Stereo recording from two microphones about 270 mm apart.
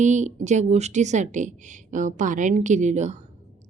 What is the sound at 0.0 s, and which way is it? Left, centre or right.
A woman's voice, right.